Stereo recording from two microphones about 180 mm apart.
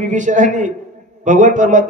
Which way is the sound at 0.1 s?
45° right (ahead or behind).